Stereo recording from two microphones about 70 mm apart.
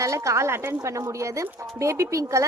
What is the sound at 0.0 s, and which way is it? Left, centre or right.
A woman's voice, right.